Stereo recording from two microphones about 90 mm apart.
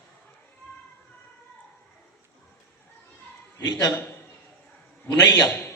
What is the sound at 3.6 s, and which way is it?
Speech, 45° left (ahead or behind).